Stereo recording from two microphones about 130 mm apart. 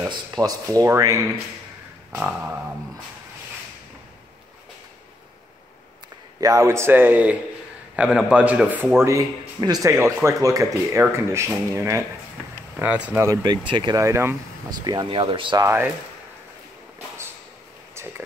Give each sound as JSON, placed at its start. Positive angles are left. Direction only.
{"t": 0.1, "sound": "speech", "side_deg": -30}
{"t": 2.1, "sound": "speech", "side_deg": -5}
{"t": 6.4, "sound": "a man's voice", "side_deg": -25}
{"t": 12.7, "sound": "speech", "side_deg": -10}
{"t": 13.3, "sound": "speech", "side_deg": -30}
{"t": 15.0, "sound": "speech", "side_deg": -40}
{"t": 15.6, "sound": "speech", "side_deg": -20}